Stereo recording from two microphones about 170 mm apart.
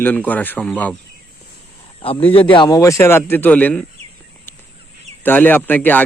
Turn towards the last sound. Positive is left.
turn(degrees=10)  # may be behind; listen again after turning